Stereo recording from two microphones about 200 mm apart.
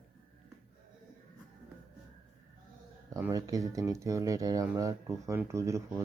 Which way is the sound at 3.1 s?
15° right (ahead or behind).